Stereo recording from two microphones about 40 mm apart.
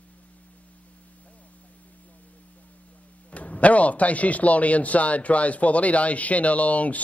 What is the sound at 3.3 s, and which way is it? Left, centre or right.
Speech, left.